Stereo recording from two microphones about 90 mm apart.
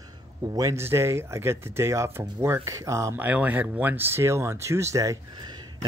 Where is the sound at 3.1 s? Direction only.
20° right (ahead or behind); by 5.5 s 40° right (ahead or behind).